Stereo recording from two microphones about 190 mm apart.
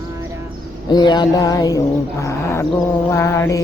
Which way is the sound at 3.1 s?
15° left (ahead or behind).